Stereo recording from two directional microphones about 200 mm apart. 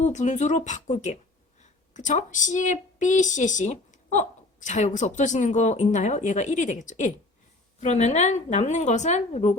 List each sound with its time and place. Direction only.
0.0 s a woman's voice: 35° left (ahead or behind)